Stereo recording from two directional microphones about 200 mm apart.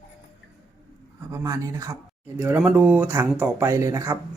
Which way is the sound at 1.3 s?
15° right (ahead or behind).